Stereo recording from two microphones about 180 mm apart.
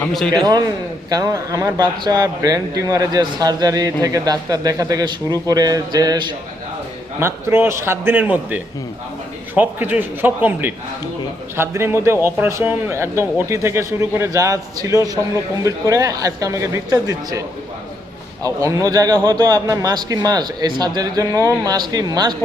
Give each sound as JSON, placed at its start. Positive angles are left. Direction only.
{"t": 0.0, "sound": "a man's voice", "side_deg": 5}
{"t": 1.1, "sound": "a man's voice", "side_deg": -20}
{"t": 18.4, "sound": "a man's voice", "side_deg": -20}